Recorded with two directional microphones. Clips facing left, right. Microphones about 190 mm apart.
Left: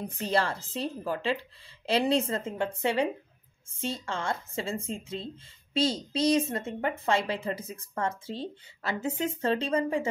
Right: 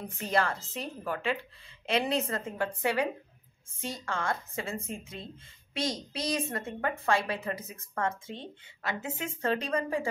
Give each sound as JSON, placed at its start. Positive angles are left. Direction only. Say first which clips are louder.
{"t": 0.2, "sound": "speech", "louder": "left 1 dB", "side_deg": 30}